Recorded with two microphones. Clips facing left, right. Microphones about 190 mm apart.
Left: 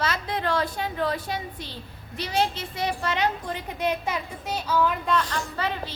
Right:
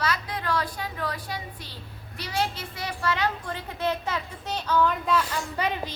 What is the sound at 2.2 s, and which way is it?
A child's voice, 20° left (ahead or behind).